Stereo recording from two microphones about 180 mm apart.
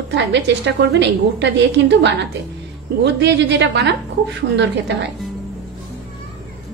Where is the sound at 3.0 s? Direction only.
75° right (ahead or behind).